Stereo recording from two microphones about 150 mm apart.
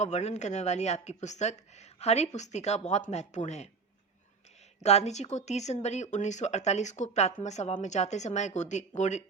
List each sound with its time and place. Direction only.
0.0 s speech: 50° left (ahead or behind)
4.8 s speech: 45° left (ahead or behind)